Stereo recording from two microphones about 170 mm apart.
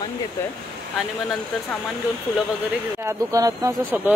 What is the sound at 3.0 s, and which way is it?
Speech, 15° right (ahead or behind).